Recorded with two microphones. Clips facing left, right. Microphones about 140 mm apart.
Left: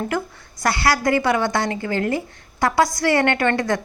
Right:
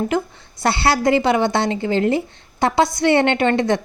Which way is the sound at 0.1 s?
20° right (ahead or behind).